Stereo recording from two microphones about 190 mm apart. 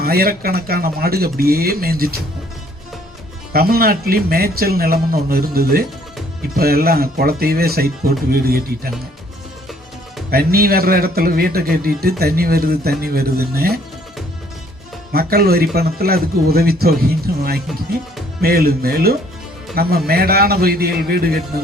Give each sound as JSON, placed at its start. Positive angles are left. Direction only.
{"t": 0.0, "sound": "speech", "side_deg": -50}
{"t": 3.5, "sound": "speech", "side_deg": -50}
{"t": 10.3, "sound": "speech", "side_deg": -55}
{"t": 15.1, "sound": "speech", "side_deg": -55}
{"t": 18.4, "sound": "speech", "side_deg": -55}